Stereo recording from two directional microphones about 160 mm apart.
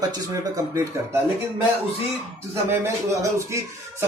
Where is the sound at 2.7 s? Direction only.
20° right (ahead or behind).